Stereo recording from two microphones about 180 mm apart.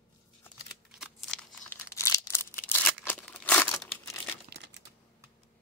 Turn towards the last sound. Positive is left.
turn(degrees=-70)  # may be behind; listen again after turning